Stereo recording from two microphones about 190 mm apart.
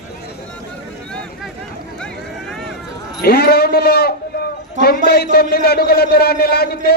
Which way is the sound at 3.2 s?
55° left (ahead or behind).